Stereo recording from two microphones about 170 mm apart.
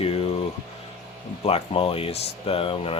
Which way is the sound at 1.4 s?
35° left (ahead or behind).